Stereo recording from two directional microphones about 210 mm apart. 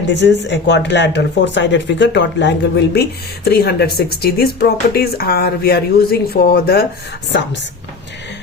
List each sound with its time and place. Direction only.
0.1 s speech: 55° left (ahead or behind)